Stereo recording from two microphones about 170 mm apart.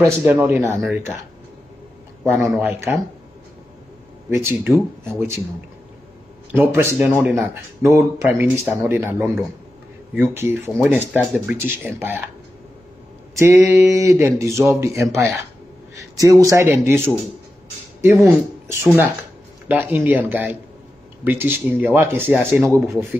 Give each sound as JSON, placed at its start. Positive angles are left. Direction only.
{"t": 0.2, "sound": "speech", "side_deg": -10}
{"t": 2.2, "sound": "speech", "side_deg": -15}
{"t": 4.3, "sound": "speech", "side_deg": -15}
{"t": 6.5, "sound": "speech", "side_deg": -15}
{"t": 13.7, "sound": "speech", "side_deg": -15}